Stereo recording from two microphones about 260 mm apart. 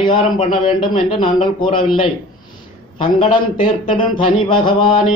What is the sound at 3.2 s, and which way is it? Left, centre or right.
A man's voice, centre.